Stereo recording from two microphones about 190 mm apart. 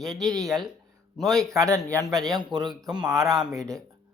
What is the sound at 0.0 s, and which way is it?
A man's voice, centre (ahead or behind).